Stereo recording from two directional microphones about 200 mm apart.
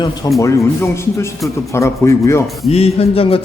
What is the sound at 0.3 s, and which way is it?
Speech, 15° left (ahead or behind).